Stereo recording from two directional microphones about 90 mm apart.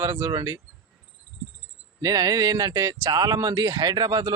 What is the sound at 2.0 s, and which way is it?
Speech, 40° right (ahead or behind).